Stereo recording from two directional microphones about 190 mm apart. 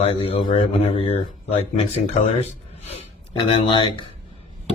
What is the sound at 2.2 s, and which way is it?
A man's voice, 35° left (ahead or behind).